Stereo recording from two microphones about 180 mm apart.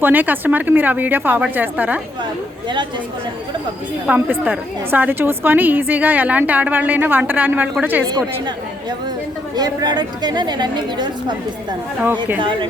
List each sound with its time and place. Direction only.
0.0 s a woman's voice: 10° right (ahead or behind)
4.0 s a woman's voice: 10° right (ahead or behind)
8.0 s a woman's voice: 25° right (ahead or behind)
9.6 s a woman's voice: 25° right (ahead or behind)
12.4 s a woman's voice: 25° right (ahead or behind)